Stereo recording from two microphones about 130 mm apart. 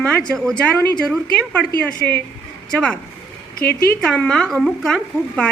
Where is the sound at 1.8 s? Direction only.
15° left (ahead or behind).